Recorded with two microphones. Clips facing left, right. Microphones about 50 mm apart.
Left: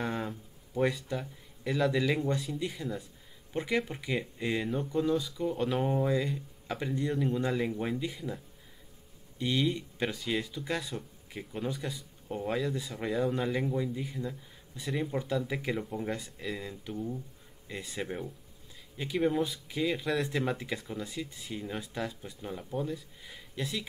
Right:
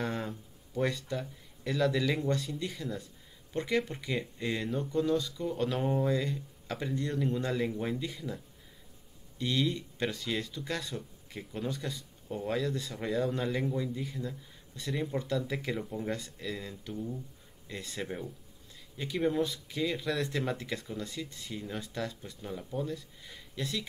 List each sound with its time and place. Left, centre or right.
0.0 s speech: centre
9.4 s speech: centre